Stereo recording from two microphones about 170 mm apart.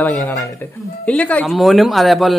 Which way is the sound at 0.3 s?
20° left (ahead or behind).